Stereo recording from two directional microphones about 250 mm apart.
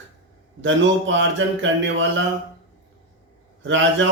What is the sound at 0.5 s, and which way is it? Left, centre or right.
A man's voice, right.